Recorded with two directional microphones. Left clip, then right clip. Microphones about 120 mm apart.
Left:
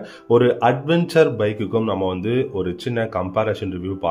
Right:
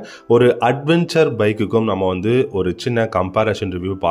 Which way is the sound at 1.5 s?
35° right (ahead or behind).